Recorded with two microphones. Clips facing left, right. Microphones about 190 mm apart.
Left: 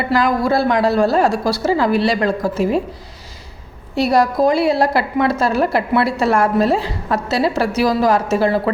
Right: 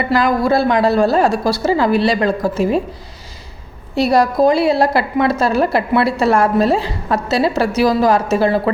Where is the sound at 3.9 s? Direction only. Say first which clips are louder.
Right 2 dB; 30° right (ahead or behind).